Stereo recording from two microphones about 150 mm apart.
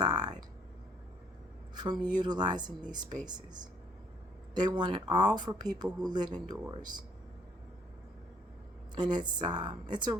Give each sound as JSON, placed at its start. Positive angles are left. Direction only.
{"t": 0.0, "sound": "a sound", "side_deg": -25}
{"t": 1.7, "sound": "a woman's voice", "side_deg": -30}
{"t": 9.0, "sound": "speech", "side_deg": -30}